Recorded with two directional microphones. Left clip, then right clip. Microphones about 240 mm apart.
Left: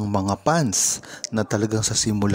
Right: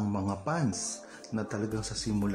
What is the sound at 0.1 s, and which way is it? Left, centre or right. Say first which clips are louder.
Speech: left 15 dB; left.